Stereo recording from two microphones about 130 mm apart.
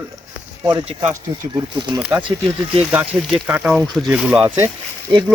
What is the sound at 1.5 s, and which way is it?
Speech, 35° right (ahead or behind).